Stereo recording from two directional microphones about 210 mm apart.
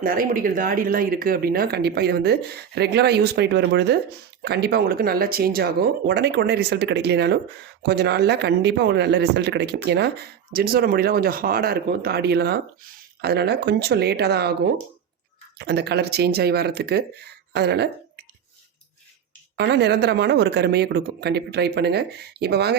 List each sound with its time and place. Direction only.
0.0 s speech: 40° right (ahead or behind)
15.5 s speech: 50° right (ahead or behind)
19.5 s speech: 55° right (ahead or behind)